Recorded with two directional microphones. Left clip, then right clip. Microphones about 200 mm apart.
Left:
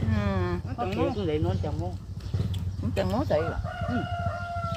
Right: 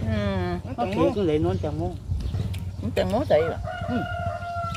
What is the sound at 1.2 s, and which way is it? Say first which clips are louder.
Speech: right 6 dB; 60° right (ahead or behind).